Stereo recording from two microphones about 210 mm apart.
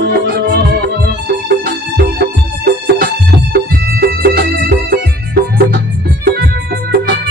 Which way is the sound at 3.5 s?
45° right (ahead or behind).